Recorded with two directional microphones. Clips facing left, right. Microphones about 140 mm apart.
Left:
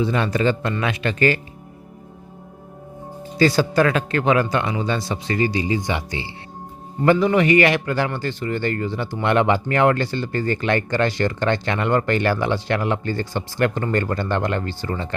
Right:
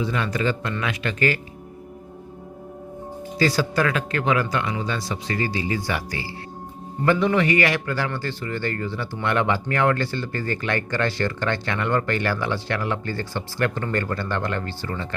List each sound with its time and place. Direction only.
0.0 s speech: 30° left (ahead or behind)
3.3 s speech: 25° left (ahead or behind)
7.3 s speech: 20° left (ahead or behind)